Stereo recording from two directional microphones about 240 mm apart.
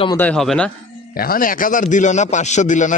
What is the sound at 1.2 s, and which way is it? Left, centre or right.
A man's voice, left.